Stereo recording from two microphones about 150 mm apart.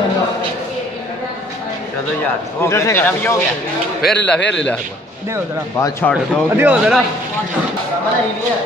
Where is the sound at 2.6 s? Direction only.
20° left (ahead or behind).